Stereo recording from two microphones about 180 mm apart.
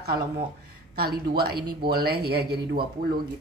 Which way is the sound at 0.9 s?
60° right (ahead or behind).